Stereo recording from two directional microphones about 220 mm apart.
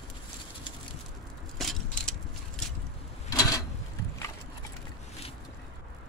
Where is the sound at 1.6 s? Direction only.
Centre (ahead or behind).